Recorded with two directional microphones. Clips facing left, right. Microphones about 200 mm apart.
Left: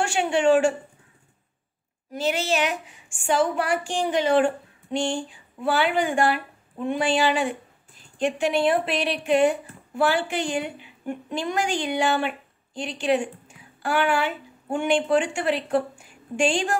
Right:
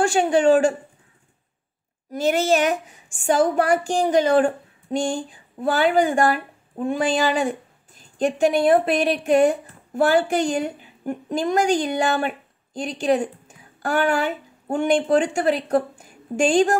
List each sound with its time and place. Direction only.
0.0 s speech: 35° right (ahead or behind)
2.1 s a woman's voice: 45° right (ahead or behind)